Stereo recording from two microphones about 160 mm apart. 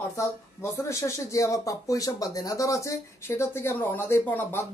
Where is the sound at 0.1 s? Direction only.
20° left (ahead or behind).